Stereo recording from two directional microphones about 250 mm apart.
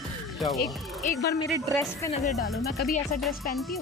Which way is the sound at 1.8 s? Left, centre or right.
Centre.